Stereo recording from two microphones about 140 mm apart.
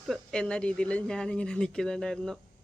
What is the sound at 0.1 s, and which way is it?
Speech, 5° left (ahead or behind).